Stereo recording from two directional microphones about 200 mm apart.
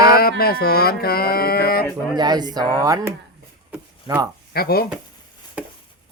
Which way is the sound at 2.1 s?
20° right (ahead or behind).